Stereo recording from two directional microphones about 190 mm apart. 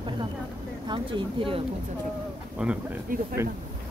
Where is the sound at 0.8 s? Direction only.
25° right (ahead or behind).